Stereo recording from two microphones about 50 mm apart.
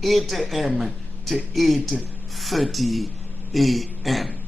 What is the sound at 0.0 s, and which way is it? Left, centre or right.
A man's voice, centre.